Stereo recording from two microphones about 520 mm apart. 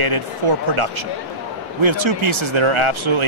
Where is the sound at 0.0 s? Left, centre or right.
Right.